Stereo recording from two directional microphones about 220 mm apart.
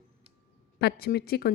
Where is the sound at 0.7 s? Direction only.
45° left (ahead or behind).